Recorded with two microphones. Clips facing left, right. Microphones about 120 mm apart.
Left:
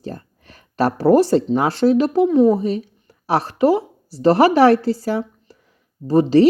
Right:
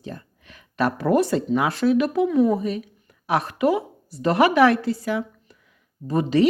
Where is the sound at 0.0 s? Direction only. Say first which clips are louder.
Left 5 dB; 40° left (ahead or behind).